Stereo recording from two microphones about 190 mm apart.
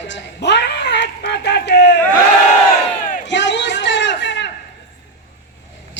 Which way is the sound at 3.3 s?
70° left (ahead or behind).